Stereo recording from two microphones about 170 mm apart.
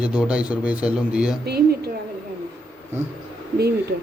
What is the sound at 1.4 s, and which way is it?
Speech, 70° right (ahead or behind).